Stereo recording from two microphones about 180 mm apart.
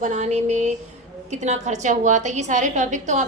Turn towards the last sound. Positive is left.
turn(degrees=-45)  # may be behind; listen again after turning